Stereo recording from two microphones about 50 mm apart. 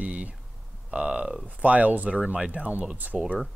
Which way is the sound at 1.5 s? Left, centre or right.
Right.